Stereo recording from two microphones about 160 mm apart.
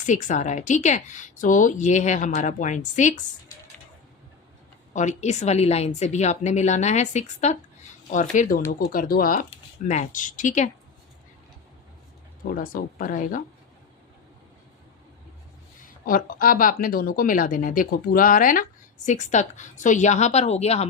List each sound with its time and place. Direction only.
0.0 s a woman's voice: 50° left (ahead or behind)
4.9 s a woman's voice: 45° left (ahead or behind)
12.5 s speech: 60° left (ahead or behind)
16.0 s a woman's voice: 60° left (ahead or behind); by 20.8 s 40° left (ahead or behind)